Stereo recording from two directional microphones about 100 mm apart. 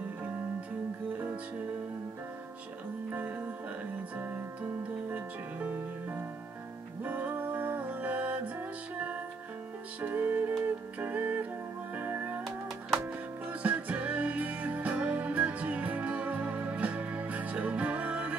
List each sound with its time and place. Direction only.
3.1 s music: 20° right (ahead or behind)
5.1 s music: 15° right (ahead or behind)